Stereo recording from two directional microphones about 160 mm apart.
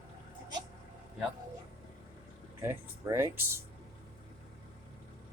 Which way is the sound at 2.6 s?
15° right (ahead or behind).